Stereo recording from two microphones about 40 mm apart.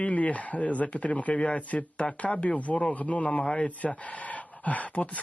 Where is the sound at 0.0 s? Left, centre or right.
Left.